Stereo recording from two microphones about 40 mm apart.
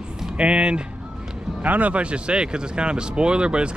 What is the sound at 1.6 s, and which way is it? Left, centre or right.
Speech, right.